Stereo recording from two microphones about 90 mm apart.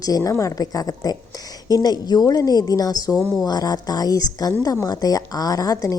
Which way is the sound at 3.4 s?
45° left (ahead or behind).